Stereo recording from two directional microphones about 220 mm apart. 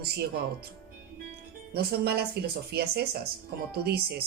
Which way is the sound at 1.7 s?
45° right (ahead or behind).